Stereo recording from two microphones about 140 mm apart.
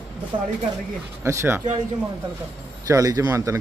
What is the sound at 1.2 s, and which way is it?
Speech, 20° right (ahead or behind).